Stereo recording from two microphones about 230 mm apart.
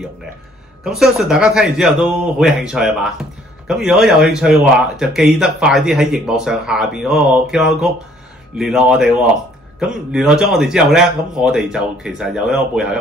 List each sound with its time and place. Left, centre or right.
0.8 s a man's voice: centre